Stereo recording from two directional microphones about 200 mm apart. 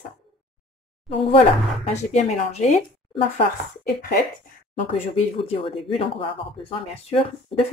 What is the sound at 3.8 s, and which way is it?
Speech, 50° left (ahead or behind).